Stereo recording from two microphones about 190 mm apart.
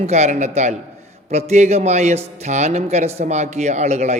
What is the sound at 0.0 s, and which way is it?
Speech, 35° right (ahead or behind).